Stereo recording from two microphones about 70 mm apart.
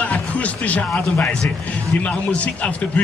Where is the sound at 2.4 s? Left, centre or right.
Centre.